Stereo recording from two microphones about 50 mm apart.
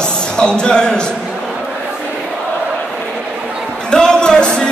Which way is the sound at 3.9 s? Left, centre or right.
Centre.